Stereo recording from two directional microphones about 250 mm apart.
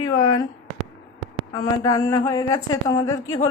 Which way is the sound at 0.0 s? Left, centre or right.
Centre.